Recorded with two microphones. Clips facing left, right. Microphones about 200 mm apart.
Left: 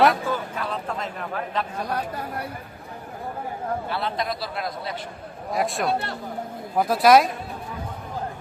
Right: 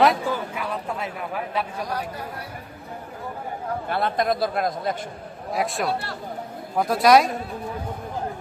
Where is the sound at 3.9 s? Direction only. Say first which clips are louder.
Right 4 dB; 50° right (ahead or behind).